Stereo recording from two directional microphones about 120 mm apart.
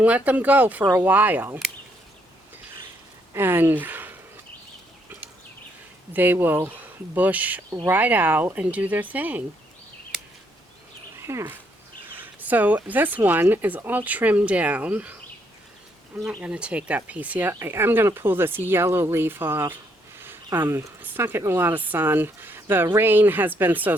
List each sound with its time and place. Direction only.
0.0 s speech: 10° right (ahead or behind)
3.3 s speech: 20° right (ahead or behind)
6.1 s speech: 15° right (ahead or behind)
11.2 s speech: 20° right (ahead or behind)
16.4 s speech: 10° right (ahead or behind)